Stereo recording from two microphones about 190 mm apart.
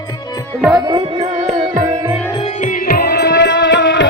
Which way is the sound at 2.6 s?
50° left (ahead or behind).